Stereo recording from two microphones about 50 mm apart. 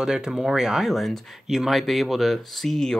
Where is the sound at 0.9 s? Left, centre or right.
Centre.